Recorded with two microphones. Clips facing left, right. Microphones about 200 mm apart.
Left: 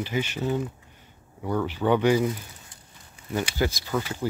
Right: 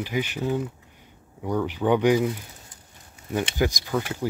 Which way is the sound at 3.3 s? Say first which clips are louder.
Right 2 dB; 15° right (ahead or behind).